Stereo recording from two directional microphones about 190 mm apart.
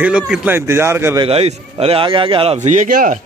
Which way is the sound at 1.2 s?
30° right (ahead or behind).